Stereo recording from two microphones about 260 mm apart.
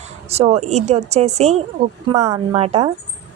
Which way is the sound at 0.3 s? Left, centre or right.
Right.